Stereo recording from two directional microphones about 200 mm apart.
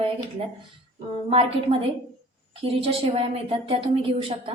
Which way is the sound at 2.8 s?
30° right (ahead or behind).